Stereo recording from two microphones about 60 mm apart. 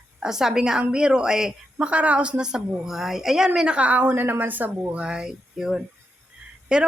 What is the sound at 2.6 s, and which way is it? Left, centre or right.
A woman's voice, centre.